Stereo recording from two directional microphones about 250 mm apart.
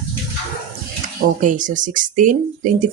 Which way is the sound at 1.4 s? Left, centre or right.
Right.